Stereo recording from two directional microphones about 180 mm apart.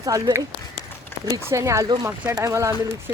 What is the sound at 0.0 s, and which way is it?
Speech, 20° right (ahead or behind).